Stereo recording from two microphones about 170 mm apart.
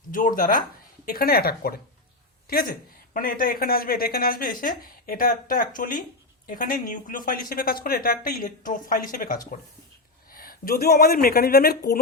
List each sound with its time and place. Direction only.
0.1 s speech: 50° left (ahead or behind)